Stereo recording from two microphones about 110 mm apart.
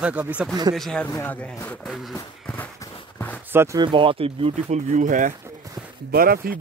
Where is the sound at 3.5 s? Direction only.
20° right (ahead or behind).